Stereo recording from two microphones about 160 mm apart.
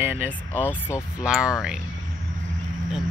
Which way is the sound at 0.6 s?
20° left (ahead or behind).